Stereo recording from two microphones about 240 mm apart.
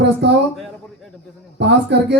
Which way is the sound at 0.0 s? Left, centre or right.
Right.